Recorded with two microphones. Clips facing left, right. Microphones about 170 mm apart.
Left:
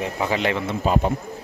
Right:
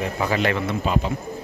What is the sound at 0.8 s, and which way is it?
Speech, 40° left (ahead or behind).